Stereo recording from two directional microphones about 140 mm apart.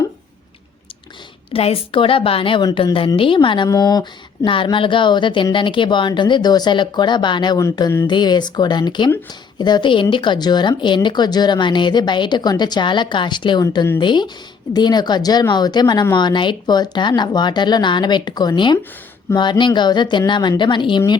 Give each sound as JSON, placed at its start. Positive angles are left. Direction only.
{"t": 1.5, "sound": "speech", "side_deg": 40}